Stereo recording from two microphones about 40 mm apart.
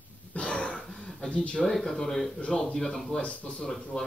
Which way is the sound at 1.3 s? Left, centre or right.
Left.